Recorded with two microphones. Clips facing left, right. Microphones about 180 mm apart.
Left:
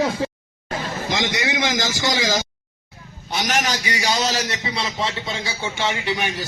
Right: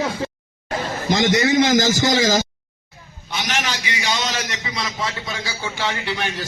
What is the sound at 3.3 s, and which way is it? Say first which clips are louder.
A man's voice: left 3 dB; 40° left (ahead or behind).